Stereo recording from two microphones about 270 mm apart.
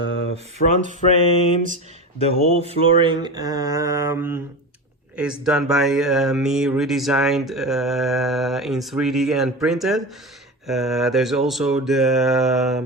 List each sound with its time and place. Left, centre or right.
0.0 s a sound: left
0.6 s mantra: left
2.6 s mantra: centre
5.1 s speech: centre